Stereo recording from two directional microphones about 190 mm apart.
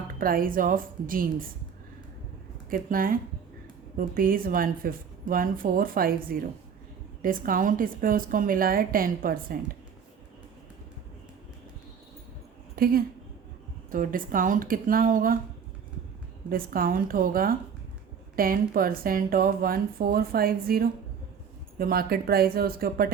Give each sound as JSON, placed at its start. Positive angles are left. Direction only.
{"t": 0.2, "sound": "speech", "side_deg": -50}
{"t": 2.6, "sound": "speech", "side_deg": -50}
{"t": 12.7, "sound": "speech", "side_deg": -50}
{"t": 16.5, "sound": "speech", "side_deg": -50}